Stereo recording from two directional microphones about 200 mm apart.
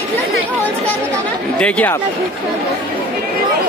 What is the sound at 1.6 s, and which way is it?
Speech, 5° left (ahead or behind).